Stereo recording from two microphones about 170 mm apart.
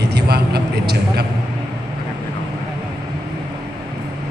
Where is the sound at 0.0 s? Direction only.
75° right (ahead or behind).